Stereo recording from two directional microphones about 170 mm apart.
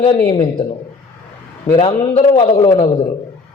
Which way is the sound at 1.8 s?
35° left (ahead or behind).